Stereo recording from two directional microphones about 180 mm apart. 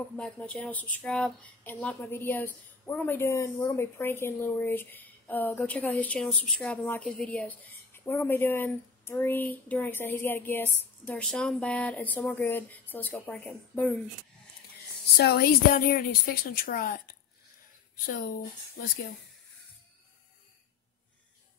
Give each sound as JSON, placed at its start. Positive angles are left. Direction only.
{"t": 0.1, "sound": "speech", "side_deg": 5}
{"t": 15.1, "sound": "a woman's voice", "side_deg": 60}